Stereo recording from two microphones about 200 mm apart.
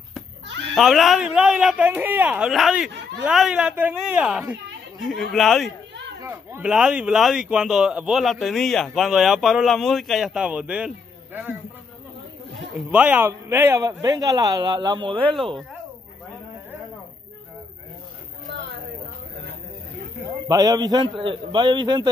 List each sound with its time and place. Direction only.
0.7 s speech: centre (ahead or behind)
6.2 s speech: 10° right (ahead or behind)
12.5 s a man's voice: 5° right (ahead or behind); by 15.5 s 25° right (ahead or behind)
20.4 s a man's voice: 20° right (ahead or behind)